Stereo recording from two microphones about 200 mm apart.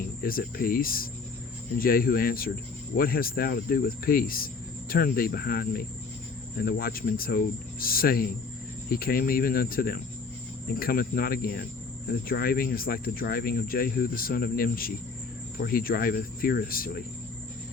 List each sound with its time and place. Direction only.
0.2 s speech: 45° left (ahead or behind)